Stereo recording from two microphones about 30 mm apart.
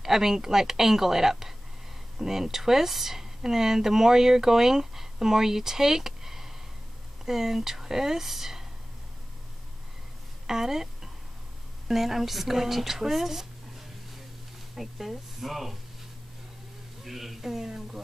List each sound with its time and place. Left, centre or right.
0.0 s speech: centre
10.4 s speech: centre
14.8 s speech: centre
17.0 s speech: centre